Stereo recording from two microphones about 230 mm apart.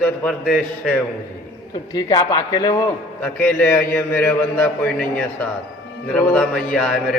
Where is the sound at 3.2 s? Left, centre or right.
Centre.